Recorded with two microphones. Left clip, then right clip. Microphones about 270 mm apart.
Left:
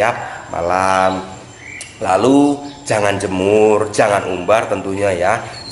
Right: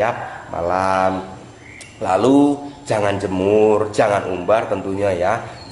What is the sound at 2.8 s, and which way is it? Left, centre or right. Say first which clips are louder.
Speech: left 3 dB; centre.